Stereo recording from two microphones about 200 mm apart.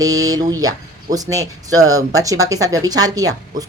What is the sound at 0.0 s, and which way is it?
Speech, 20° right (ahead or behind).